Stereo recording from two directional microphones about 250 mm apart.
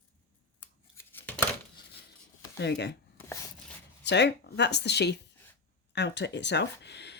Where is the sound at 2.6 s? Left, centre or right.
Left.